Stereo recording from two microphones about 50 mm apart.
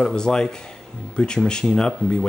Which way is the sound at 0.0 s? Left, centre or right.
Centre.